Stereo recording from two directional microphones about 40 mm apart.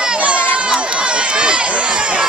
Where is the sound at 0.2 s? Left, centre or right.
Right.